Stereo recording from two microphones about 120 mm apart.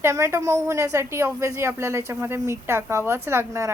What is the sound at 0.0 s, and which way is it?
A woman's voice, 25° right (ahead or behind).